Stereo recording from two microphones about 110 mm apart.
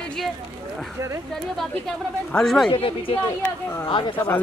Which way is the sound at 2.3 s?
Centre (ahead or behind).